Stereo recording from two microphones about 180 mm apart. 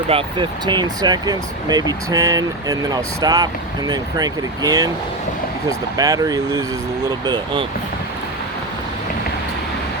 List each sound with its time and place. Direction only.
0.1 s speech: 30° right (ahead or behind)